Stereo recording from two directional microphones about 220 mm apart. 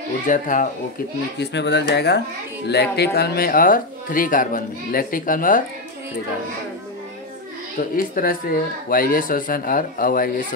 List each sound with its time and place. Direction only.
0.3 s speech: 35° left (ahead or behind)
1.4 s speech: 50° left (ahead or behind)
7.9 s speech: 40° left (ahead or behind)